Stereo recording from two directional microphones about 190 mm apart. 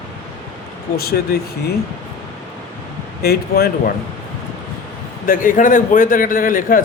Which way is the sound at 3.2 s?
55° left (ahead or behind).